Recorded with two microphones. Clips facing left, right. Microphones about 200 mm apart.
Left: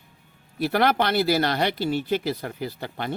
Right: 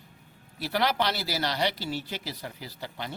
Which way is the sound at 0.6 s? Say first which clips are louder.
Left 6 dB; 55° left (ahead or behind).